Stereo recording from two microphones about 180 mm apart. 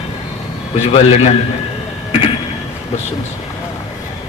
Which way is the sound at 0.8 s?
35° left (ahead or behind).